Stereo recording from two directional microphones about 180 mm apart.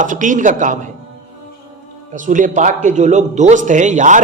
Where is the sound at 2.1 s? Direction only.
45° right (ahead or behind).